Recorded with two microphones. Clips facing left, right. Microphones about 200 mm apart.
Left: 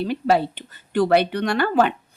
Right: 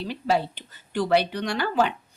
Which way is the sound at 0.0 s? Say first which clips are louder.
Left 5 dB; 55° left (ahead or behind).